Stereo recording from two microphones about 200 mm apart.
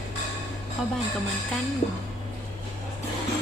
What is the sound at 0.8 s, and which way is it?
Speech, centre (ahead or behind).